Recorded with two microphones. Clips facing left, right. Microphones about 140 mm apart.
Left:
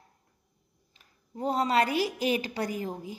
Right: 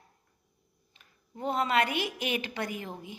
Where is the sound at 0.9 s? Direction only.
35° left (ahead or behind).